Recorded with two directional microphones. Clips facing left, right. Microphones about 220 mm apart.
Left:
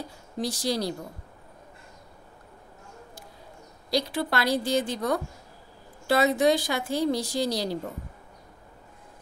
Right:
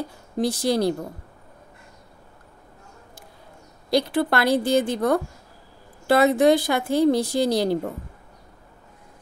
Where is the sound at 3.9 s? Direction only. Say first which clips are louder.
Right 6 dB; 55° right (ahead or behind).